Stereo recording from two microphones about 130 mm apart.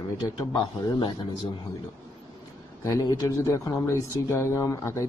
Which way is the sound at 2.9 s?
25° left (ahead or behind).